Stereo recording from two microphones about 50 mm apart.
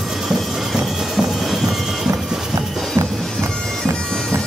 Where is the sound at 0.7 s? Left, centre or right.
Centre.